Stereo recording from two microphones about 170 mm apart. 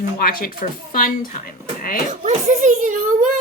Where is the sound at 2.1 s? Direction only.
50° right (ahead or behind).